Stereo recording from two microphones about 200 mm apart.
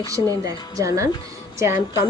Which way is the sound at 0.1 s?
15° right (ahead or behind).